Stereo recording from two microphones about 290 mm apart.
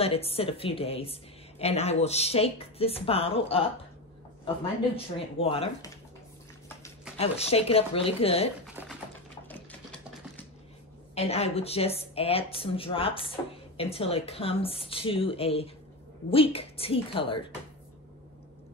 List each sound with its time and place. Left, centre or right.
0.0 s a woman's voice: centre
4.9 s a woman's voice: centre
7.2 s a woman's voice: left
11.1 s a woman's voice: left